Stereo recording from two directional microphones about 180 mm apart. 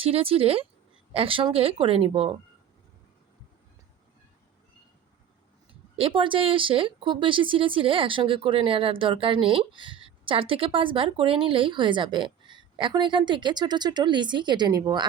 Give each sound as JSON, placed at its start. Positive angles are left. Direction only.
{"t": 0.0, "sound": "speech", "side_deg": -30}
{"t": 6.0, "sound": "speech", "side_deg": -30}